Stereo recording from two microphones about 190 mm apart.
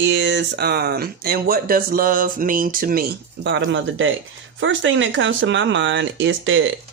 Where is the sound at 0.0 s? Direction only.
70° right (ahead or behind); by 6.7 s 90° right.